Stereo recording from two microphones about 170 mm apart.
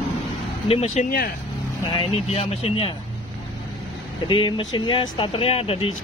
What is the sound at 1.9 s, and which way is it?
Speech, 30° left (ahead or behind).